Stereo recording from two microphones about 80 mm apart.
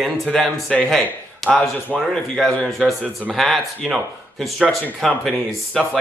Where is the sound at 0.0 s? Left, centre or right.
Centre.